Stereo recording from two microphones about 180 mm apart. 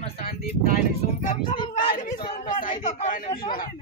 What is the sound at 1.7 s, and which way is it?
A man's voice, 45° left (ahead or behind).